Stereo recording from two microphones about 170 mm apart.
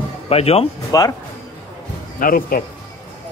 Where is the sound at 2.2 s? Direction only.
55° left (ahead or behind).